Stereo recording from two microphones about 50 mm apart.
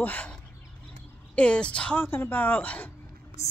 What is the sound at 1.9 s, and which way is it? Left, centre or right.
Speech, left.